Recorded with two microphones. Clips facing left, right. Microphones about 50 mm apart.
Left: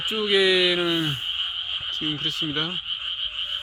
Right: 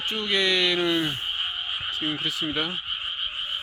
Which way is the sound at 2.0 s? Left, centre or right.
Centre.